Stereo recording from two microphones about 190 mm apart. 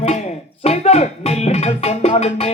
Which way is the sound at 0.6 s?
35° left (ahead or behind).